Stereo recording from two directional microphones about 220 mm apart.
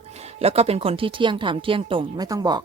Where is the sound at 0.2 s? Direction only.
30° right (ahead or behind).